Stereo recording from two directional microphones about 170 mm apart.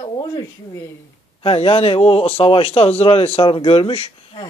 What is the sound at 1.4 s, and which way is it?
A man's voice, 35° left (ahead or behind).